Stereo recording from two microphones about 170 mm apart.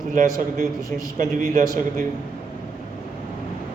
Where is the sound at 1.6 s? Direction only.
20° left (ahead or behind).